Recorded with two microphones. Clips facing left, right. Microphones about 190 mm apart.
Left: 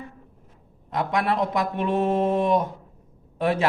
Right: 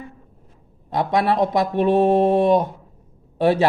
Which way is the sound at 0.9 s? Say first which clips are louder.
Right 5 dB; 35° right (ahead or behind).